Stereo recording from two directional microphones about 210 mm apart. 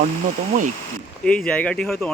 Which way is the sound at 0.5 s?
40° right (ahead or behind).